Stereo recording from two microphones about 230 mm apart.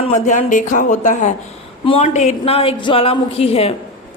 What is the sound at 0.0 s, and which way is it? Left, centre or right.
A woman's voice, left.